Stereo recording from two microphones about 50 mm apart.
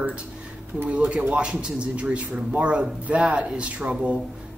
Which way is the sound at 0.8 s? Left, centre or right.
Right.